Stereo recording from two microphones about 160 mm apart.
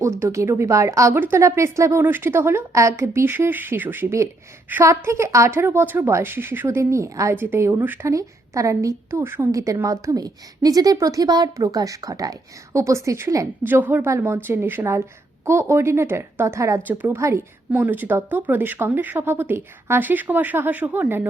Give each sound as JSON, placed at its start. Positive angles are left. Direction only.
{"t": 0.0, "sound": "speech", "side_deg": -20}